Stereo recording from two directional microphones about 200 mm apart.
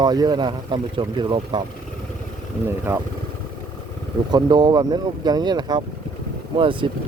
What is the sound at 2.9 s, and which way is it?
Speech, 15° right (ahead or behind).